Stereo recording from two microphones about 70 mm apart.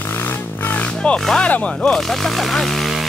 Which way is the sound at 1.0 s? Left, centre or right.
Centre.